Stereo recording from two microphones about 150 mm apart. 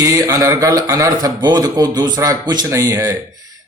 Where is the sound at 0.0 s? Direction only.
20° right (ahead or behind).